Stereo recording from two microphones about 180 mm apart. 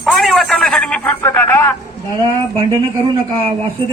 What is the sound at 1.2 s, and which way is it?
Speech, 10° left (ahead or behind).